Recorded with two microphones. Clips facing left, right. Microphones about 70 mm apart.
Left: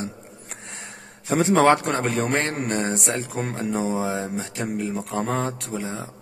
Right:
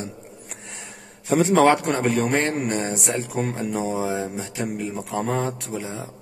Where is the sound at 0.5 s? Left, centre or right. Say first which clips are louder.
Left 4 dB; left.